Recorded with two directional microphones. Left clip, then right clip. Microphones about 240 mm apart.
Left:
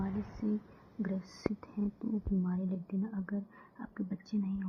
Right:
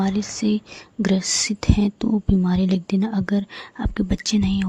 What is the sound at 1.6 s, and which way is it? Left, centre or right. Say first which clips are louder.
A woman's voice: right 18 dB; right.